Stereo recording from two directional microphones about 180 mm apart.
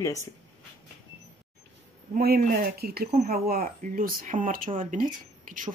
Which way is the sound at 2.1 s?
55° right (ahead or behind).